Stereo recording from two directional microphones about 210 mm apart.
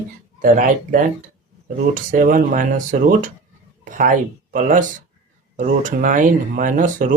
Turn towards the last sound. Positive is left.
turn(degrees=-40)  # may be behind; listen again after turning